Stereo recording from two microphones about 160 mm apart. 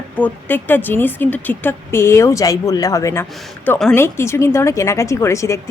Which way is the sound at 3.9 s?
15° left (ahead or behind).